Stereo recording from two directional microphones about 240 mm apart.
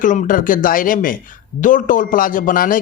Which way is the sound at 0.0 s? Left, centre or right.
Left.